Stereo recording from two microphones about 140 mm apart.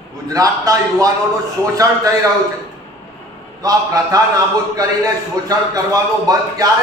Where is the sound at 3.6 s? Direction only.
25° right (ahead or behind).